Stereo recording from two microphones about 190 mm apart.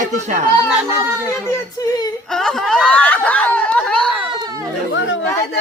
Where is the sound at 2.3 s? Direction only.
Centre (ahead or behind).